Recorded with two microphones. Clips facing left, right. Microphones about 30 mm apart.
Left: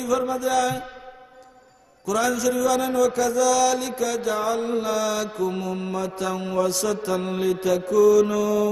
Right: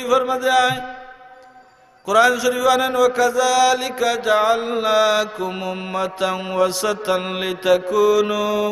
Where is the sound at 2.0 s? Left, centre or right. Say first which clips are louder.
Right 7 dB; right.